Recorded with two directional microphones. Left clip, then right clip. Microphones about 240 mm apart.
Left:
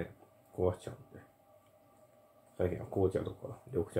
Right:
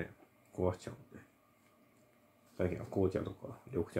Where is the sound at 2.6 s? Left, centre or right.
Centre.